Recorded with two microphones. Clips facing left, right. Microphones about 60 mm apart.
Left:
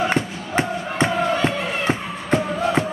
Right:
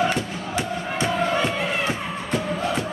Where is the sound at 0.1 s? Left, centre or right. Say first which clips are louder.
Left 4 dB; left.